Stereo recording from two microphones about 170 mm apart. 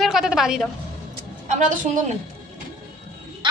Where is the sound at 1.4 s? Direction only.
45° right (ahead or behind).